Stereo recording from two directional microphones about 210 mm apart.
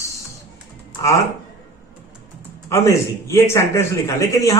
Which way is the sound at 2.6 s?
15° left (ahead or behind).